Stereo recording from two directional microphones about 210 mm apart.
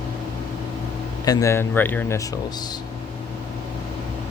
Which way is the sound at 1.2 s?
15° left (ahead or behind).